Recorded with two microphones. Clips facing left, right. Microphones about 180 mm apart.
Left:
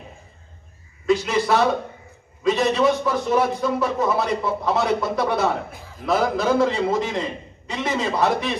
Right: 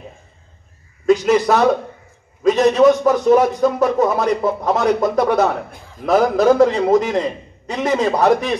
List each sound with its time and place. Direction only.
1.0 s speech: 45° right (ahead or behind)